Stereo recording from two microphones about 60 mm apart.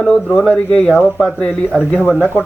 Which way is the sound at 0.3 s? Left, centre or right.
Centre.